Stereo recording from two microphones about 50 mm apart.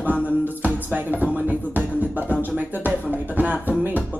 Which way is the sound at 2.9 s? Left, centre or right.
Right.